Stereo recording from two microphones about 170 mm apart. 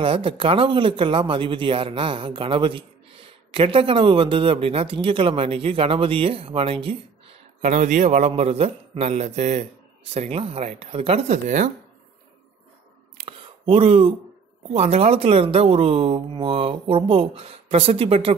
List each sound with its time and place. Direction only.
0.0 s speech: 30° right (ahead or behind)
7.6 s a man's voice: 45° right (ahead or behind)
13.2 s a sound: 35° right (ahead or behind)
14.7 s speech: 40° right (ahead or behind)